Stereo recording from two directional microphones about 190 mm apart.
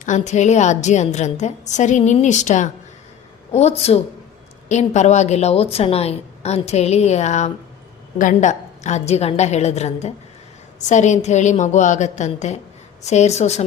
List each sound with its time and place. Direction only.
0.0 s a woman's voice: 40° left (ahead or behind)